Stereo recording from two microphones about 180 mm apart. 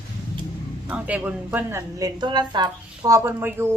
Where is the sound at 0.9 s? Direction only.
5° right (ahead or behind); by 3.2 s 25° right (ahead or behind).